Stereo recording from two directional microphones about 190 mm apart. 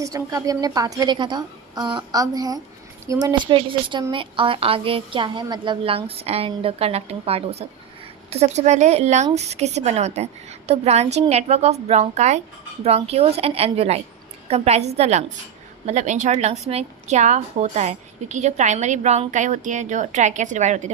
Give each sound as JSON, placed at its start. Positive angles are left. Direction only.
{"t": 0.0, "sound": "a woman's voice", "side_deg": -20}